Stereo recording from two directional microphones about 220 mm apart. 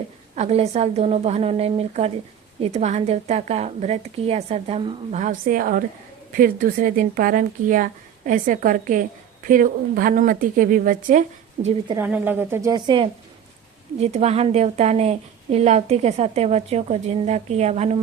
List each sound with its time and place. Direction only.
0.3 s a woman's voice: 30° right (ahead or behind)
11.9 s a woman's voice: 10° right (ahead or behind); by 18.0 s 30° right (ahead or behind)